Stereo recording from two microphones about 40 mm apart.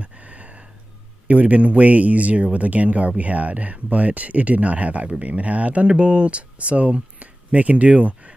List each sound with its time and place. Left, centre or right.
0.0 s a sound: right
1.2 s speech: right
5.9 s speech: right